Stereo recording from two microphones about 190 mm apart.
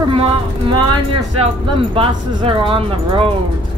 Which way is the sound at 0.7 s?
25° right (ahead or behind).